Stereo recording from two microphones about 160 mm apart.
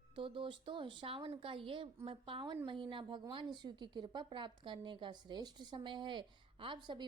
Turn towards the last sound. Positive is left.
turn(degrees=-30)  # may be behind; listen again after turning